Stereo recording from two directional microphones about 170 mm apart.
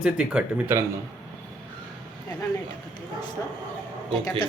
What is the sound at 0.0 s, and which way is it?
Speech, 5° right (ahead or behind).